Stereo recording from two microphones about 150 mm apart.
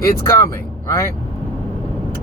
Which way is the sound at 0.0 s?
20° left (ahead or behind).